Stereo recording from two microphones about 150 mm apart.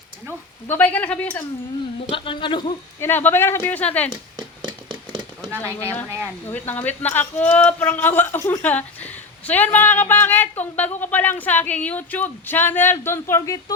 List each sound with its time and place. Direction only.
0.7 s a man's voice: 10° left (ahead or behind)
2.0 s speech: 35° left (ahead or behind)
3.0 s a man's voice: 15° left (ahead or behind)
4.1 s a sound: 30° right (ahead or behind)
6.1 s speech: 15° right (ahead or behind)
6.5 s a man's voice: 10° left (ahead or behind)